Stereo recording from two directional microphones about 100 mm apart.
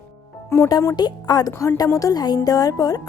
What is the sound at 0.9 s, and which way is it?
A woman's voice, 40° left (ahead or behind).